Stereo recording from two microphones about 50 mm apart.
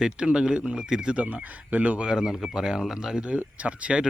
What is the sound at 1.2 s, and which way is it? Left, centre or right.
Speech, right.